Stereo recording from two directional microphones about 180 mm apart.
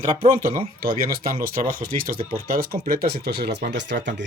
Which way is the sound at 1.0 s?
55° right (ahead or behind).